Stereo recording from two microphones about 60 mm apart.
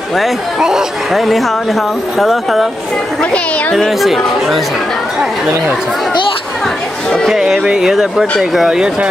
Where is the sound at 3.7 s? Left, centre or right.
Centre.